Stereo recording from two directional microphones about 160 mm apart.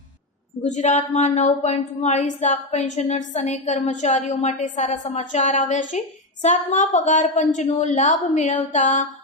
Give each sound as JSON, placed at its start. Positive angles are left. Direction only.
{"t": 0.6, "sound": "speech", "side_deg": 45}